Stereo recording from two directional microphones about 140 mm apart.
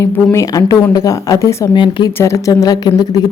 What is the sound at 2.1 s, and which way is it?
Speech, 20° left (ahead or behind).